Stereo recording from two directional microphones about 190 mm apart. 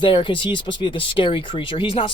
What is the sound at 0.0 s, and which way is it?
Speech, 25° left (ahead or behind).